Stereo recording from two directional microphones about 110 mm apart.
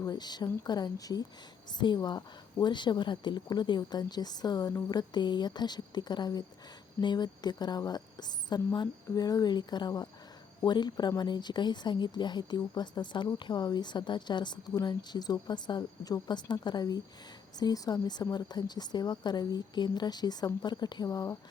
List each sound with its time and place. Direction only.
0.0 s speech: 40° left (ahead or behind)